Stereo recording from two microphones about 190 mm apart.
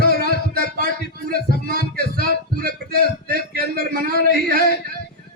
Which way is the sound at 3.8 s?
50° right (ahead or behind).